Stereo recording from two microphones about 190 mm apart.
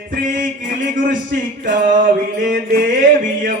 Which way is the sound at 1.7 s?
45° right (ahead or behind).